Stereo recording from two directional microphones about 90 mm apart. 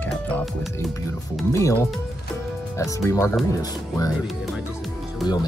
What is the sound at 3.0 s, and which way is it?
Speech, 35° left (ahead or behind).